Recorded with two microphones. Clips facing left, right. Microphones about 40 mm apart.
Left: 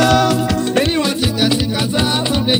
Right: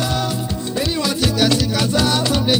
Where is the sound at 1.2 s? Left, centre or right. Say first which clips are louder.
Left 1 dB; centre.